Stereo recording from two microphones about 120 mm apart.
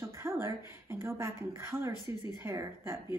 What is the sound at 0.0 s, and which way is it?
Speech, 20° right (ahead or behind).